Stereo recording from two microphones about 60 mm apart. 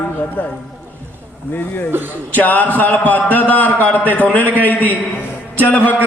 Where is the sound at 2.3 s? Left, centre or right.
Left.